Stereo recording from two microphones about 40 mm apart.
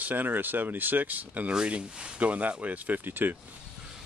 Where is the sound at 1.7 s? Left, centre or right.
Right.